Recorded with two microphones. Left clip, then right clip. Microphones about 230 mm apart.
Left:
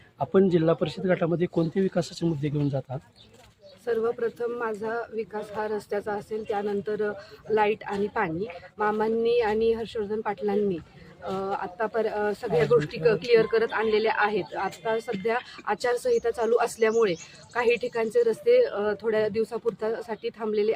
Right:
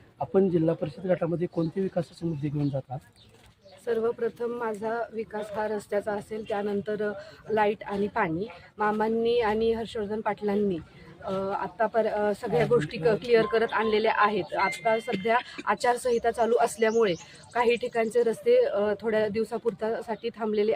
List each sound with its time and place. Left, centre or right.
0.2 s a man's voice: left
3.8 s speech: centre